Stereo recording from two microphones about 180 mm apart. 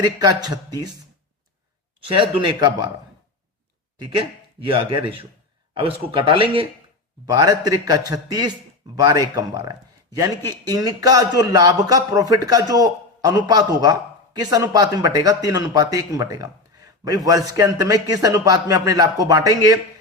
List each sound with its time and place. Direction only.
0.0 s speech: 20° right (ahead or behind)
2.0 s speech: 30° right (ahead or behind)
3.9 s speech: 25° right (ahead or behind)